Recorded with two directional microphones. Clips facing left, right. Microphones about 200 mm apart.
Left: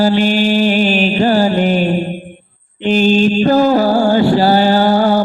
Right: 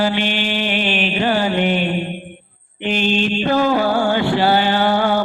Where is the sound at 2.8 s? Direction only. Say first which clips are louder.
Left 7 dB; 40° left (ahead or behind).